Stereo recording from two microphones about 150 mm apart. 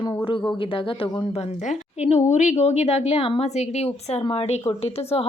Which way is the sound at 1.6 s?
50° left (ahead or behind).